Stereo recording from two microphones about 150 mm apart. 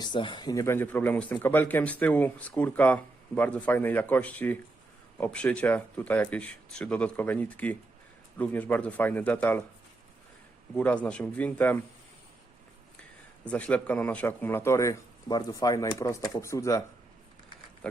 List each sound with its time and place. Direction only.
0.0 s speech: 30° left (ahead or behind); by 9.6 s 10° left (ahead or behind)
10.8 s speech: 10° left (ahead or behind)
13.5 s a man's voice: 10° left (ahead or behind)